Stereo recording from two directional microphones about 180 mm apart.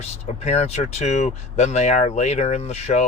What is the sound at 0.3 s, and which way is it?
Speech, 35° left (ahead or behind).